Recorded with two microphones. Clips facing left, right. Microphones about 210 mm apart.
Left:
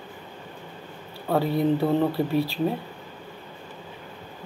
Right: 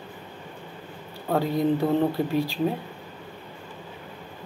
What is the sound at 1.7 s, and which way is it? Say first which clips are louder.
Speech: even; 15° right (ahead or behind).